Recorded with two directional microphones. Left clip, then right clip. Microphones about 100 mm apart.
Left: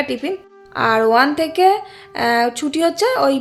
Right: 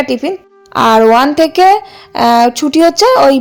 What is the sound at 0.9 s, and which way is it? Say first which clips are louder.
A woman's voice: right 6 dB; 90° right.